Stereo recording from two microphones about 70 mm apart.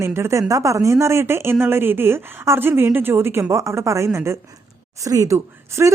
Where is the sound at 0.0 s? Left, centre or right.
Right.